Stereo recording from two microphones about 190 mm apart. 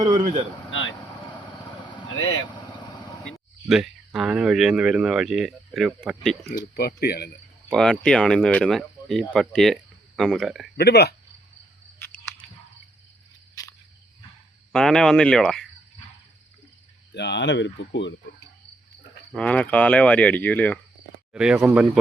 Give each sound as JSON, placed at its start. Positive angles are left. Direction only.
{"t": 0.7, "sound": "vehicle", "side_deg": 85}
{"t": 1.0, "sound": "vehicle", "side_deg": 10}
{"t": 1.7, "sound": "vehicle", "side_deg": 25}
{"t": 2.1, "sound": "speech", "side_deg": 90}
{"t": 2.5, "sound": "vehicle", "side_deg": 20}
{"t": 3.7, "sound": "speech", "side_deg": 0}
{"t": 6.7, "sound": "speech", "side_deg": 55}
{"t": 7.7, "sound": "speech", "side_deg": 5}
{"t": 10.8, "sound": "speech", "side_deg": 60}
{"t": 13.6, "sound": "cricket", "side_deg": 20}
{"t": 14.7, "sound": "speech", "side_deg": 0}
{"t": 17.2, "sound": "speech", "side_deg": 65}
{"t": 19.4, "sound": "speech", "side_deg": 5}
{"t": 21.3, "sound": "speech", "side_deg": -5}